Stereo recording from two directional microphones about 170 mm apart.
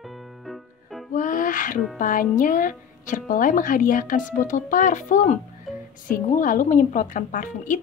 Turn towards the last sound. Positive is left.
turn(degrees=50)  # may be behind; listen again after turning